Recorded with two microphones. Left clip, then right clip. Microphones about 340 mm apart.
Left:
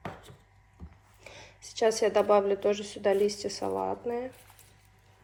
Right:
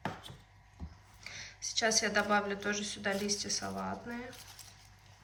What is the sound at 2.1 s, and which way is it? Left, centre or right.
Speech, centre.